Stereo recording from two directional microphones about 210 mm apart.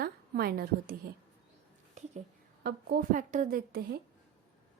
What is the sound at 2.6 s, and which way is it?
A woman's voice, 45° right (ahead or behind).